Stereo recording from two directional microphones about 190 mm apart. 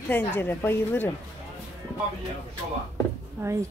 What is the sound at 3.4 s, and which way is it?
Speech, 15° right (ahead or behind).